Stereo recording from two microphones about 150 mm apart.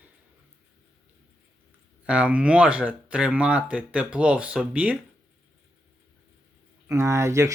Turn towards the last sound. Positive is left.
turn(degrees=-20)  # may be behind; listen again after turning